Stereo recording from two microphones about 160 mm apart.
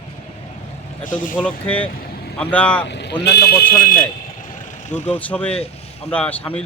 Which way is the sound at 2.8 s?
90° left.